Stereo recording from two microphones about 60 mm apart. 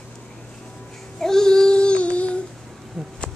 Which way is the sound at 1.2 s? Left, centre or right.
Centre.